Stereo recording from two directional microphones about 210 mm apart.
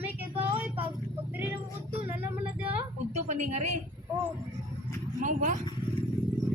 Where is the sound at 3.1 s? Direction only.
30° right (ahead or behind).